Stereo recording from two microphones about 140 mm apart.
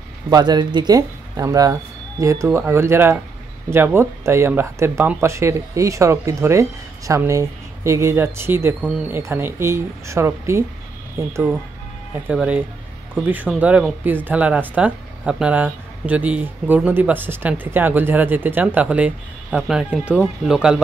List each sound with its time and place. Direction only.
0.3 s speech: 30° right (ahead or behind); by 20.8 s 5° right (ahead or behind)